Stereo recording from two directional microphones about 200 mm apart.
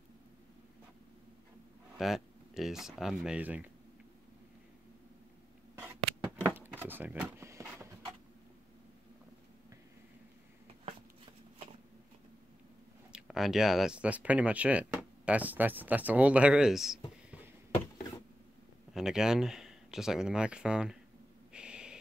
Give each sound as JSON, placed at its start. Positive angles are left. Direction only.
{"t": 2.0, "sound": "speech", "side_deg": 0}
{"t": 6.5, "sound": "a sound", "side_deg": -10}
{"t": 13.1, "sound": "speech", "side_deg": 0}
{"t": 18.9, "sound": "speech", "side_deg": -5}
{"t": 21.5, "sound": "owl", "side_deg": -5}